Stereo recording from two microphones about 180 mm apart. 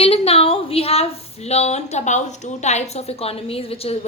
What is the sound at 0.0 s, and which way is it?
A woman's voice, 35° left (ahead or behind).